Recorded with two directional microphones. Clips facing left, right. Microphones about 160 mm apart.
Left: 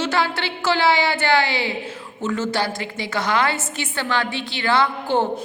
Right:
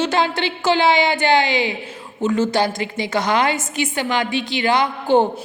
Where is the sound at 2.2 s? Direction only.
15° right (ahead or behind).